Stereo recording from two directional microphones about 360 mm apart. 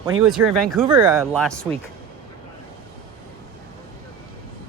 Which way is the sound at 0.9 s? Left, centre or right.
Centre.